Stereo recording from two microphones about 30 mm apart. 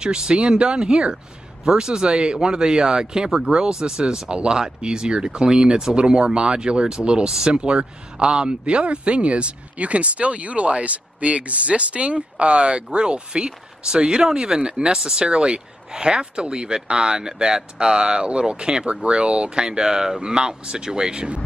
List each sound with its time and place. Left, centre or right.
0.0 s speech: right